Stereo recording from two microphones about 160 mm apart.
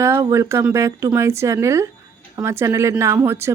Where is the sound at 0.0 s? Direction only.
15° right (ahead or behind).